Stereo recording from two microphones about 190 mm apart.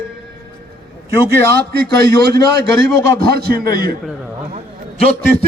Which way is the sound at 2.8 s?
Centre (ahead or behind).